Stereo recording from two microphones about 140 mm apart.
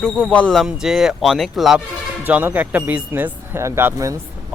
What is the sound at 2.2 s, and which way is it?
Speech, 10° right (ahead or behind).